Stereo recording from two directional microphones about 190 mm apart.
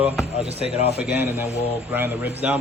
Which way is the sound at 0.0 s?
5° right (ahead or behind).